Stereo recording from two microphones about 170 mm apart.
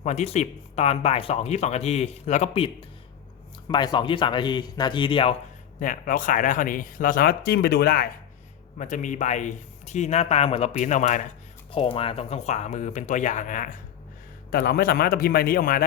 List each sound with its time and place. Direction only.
0.0 s speech: 40° left (ahead or behind)
5.8 s speech: 50° left (ahead or behind)
8.8 s speech: 45° left (ahead or behind)
11.7 s speech: 30° left (ahead or behind); by 13.7 s 50° left (ahead or behind)
14.5 s a man's voice: 60° left (ahead or behind)